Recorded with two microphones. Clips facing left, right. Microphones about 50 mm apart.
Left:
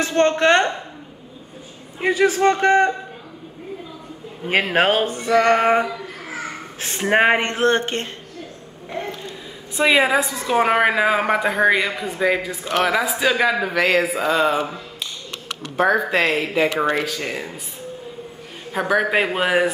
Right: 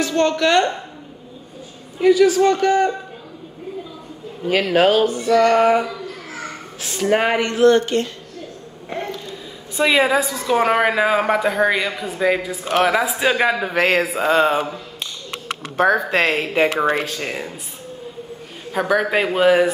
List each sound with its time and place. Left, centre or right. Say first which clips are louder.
0.0 s speech: left 1 dB; left
2.0 s speech: right 4 dB; left
4.5 s speech: right 2 dB; left
5.9 s babbling: even; centre
6.8 s speech: left 1 dB; left
9.8 s a woman's voice: even; centre
12.4 s speech: right 2 dB; centre
13.2 s a man's voice: left 1 dB; centre
13.7 s speech: right 2 dB; right
15.6 s speech: right 1 dB; right
18.7 s a woman's voice: right 1 dB; centre